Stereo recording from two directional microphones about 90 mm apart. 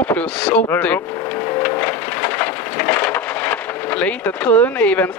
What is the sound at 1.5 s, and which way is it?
Wood, 25° left (ahead or behind).